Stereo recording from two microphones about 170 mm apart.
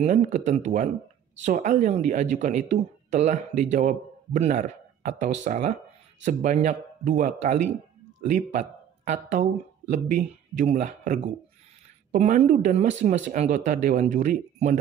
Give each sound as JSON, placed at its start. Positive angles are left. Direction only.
{"t": 0.0, "sound": "speech", "side_deg": -45}